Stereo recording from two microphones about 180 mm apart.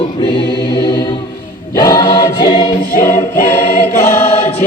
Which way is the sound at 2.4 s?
25° left (ahead or behind).